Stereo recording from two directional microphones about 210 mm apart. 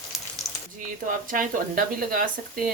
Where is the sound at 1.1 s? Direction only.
40° right (ahead or behind).